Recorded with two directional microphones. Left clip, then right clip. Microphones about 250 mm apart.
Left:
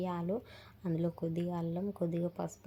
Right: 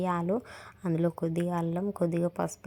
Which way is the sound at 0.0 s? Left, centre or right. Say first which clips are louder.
Right 7 dB; right.